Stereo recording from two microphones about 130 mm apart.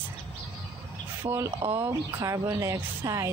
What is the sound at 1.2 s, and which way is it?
Speech, 35° right (ahead or behind).